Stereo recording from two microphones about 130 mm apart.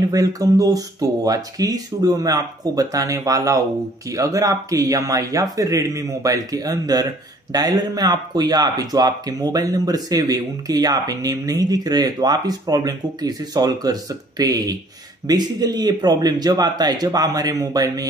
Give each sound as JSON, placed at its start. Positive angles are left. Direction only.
{"t": 0.1, "sound": "speech", "side_deg": -25}